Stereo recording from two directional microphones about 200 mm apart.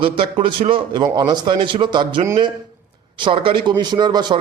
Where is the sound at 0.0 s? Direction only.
25° right (ahead or behind).